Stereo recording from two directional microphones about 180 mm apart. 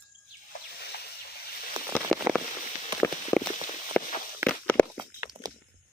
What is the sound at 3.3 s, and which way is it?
Walk, 5° left (ahead or behind).